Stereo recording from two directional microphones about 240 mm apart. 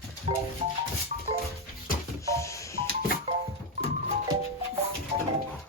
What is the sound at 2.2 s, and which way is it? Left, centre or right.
Music, centre.